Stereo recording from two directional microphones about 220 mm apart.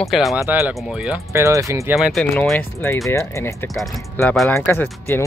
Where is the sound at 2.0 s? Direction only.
Centre (ahead or behind).